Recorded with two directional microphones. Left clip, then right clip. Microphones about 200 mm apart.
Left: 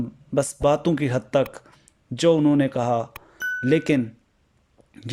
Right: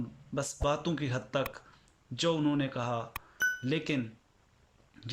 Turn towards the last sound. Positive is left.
turn(degrees=35)  # may be behind; listen again after turning